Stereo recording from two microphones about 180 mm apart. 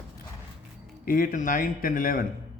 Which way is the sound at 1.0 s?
50° left (ahead or behind).